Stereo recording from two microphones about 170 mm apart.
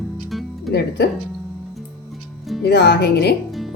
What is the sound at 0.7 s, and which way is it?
Speech, 75° left (ahead or behind).